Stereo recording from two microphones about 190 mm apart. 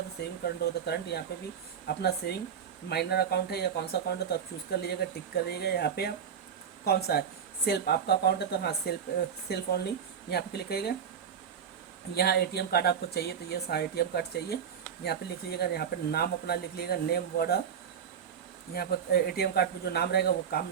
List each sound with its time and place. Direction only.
0.2 s speech: 60° left (ahead or behind)
12.1 s speech: 55° left (ahead or behind)
18.7 s speech: 55° left (ahead or behind)